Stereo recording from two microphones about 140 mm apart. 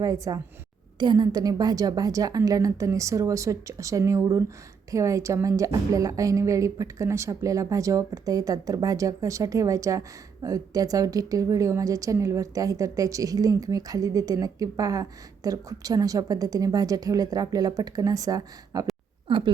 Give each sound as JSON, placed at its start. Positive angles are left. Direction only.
{"t": 0.0, "sound": "a woman's voice", "side_deg": -25}